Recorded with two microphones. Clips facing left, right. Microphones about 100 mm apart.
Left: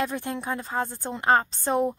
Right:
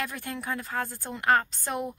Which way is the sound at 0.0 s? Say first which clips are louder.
Left 5 dB; 25° left (ahead or behind).